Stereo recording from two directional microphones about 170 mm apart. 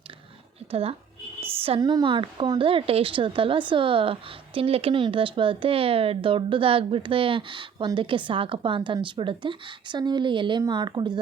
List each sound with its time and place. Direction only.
0.7 s a woman's voice: 35° right (ahead or behind)